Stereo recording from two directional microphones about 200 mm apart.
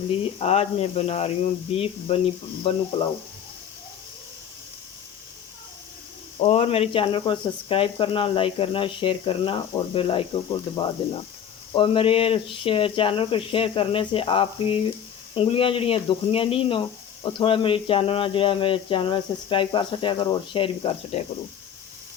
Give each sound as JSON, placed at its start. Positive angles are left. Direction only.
{"t": 0.3, "sound": "speech", "side_deg": 30}
{"t": 6.4, "sound": "speech", "side_deg": 30}